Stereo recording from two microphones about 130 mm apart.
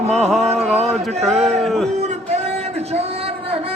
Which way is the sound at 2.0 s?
55° right (ahead or behind).